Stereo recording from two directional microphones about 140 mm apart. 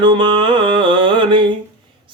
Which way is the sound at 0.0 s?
35° right (ahead or behind).